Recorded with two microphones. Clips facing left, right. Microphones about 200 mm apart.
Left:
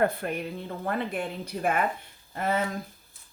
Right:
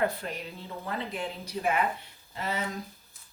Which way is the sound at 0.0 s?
55° left (ahead or behind).